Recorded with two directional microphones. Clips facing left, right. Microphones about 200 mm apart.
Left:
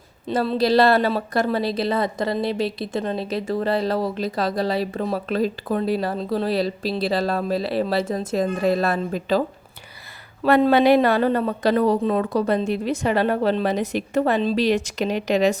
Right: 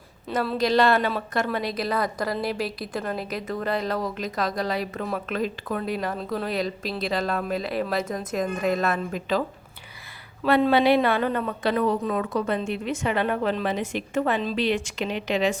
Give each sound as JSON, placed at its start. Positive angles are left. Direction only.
{"t": 0.3, "sound": "a woman's voice", "side_deg": 30}
{"t": 10.4, "sound": "a woman's voice", "side_deg": 45}